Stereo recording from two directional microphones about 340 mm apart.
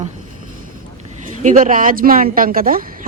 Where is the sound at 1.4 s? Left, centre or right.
Right.